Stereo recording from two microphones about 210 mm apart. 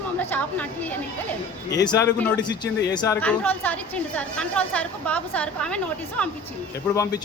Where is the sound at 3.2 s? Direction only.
5° left (ahead or behind).